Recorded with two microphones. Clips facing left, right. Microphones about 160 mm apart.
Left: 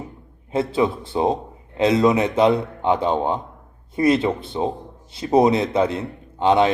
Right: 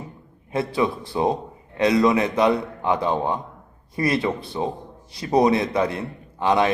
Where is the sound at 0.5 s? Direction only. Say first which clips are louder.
Left 2 dB; 20° left (ahead or behind).